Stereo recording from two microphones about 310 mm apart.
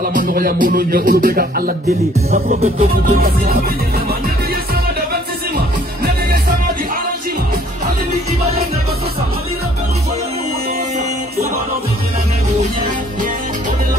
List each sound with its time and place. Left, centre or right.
0.0 s music: right